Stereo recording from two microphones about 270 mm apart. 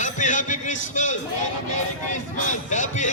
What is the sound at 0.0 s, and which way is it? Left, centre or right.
Music, left.